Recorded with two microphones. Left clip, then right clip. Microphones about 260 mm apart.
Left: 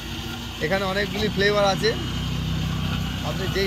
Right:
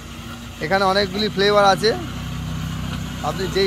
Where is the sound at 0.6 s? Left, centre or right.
Centre.